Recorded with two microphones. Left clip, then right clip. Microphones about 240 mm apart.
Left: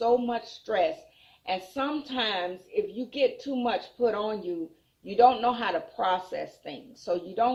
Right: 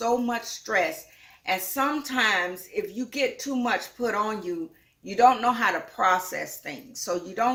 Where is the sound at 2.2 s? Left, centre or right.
Right.